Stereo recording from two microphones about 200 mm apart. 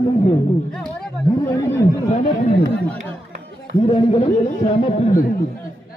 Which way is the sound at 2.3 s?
35° left (ahead or behind).